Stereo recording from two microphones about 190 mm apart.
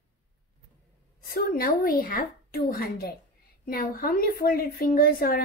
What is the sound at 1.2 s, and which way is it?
A woman's voice, 55° left (ahead or behind).